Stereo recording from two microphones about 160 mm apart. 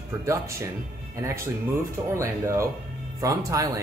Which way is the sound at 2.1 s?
15° right (ahead or behind).